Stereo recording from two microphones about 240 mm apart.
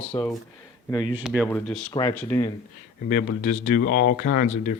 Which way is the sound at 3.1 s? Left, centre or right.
Left.